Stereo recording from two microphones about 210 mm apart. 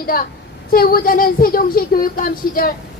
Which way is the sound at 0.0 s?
45° left (ahead or behind).